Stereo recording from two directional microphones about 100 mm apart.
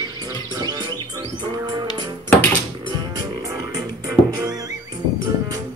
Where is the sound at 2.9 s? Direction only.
40° right (ahead or behind).